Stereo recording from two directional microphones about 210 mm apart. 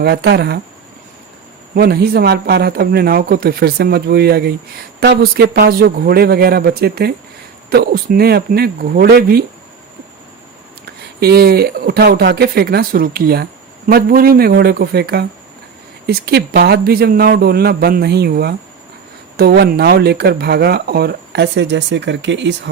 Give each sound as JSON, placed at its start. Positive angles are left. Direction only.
{"t": 0.0, "sound": "speech", "side_deg": -50}
{"t": 1.7, "sound": "speech", "side_deg": -50}
{"t": 11.2, "sound": "speech", "side_deg": -50}